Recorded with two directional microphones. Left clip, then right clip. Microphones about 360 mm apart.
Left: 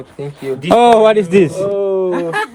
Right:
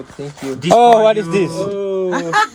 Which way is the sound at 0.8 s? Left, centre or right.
Left.